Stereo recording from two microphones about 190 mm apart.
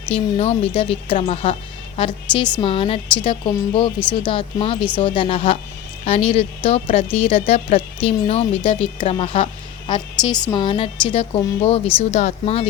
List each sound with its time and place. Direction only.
0.1 s a woman's voice: 30° left (ahead or behind)